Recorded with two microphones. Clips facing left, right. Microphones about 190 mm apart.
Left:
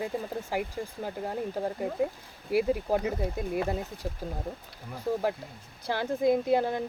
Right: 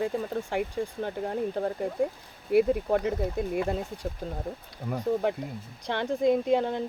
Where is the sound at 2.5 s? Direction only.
5° left (ahead or behind).